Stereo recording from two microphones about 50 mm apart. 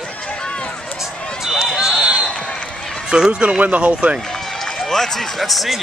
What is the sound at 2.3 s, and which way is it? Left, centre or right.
Basketball bounce, centre.